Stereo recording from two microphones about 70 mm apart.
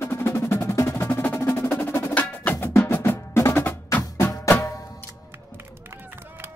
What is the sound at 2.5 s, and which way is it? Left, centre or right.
Wood block, left.